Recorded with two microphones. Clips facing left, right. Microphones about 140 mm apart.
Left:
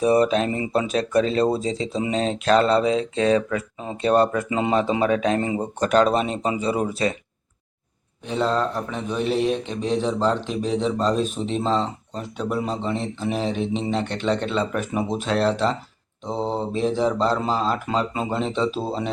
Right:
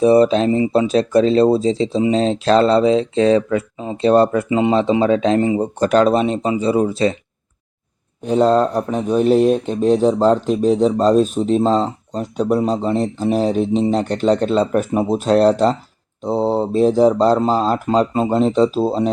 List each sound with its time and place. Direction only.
0.0 s speech: 30° right (ahead or behind)
8.2 s speech: 45° right (ahead or behind)